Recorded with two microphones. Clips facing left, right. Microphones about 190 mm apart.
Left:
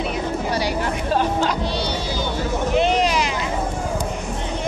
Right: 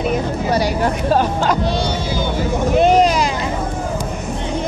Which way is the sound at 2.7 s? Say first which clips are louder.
Right 6 dB; 45° right (ahead or behind).